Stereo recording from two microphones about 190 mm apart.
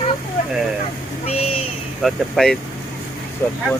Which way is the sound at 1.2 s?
30° left (ahead or behind).